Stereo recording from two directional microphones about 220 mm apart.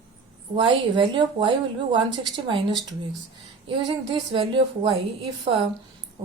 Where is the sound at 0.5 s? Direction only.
20° right (ahead or behind).